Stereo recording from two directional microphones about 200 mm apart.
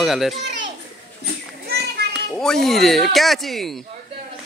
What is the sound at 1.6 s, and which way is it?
Children playing, 55° right (ahead or behind).